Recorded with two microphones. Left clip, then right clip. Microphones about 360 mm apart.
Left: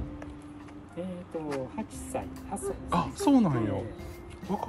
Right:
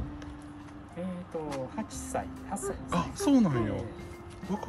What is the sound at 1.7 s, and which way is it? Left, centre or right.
Speech, right.